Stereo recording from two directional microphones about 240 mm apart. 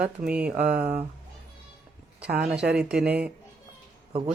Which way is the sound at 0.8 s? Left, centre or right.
Right.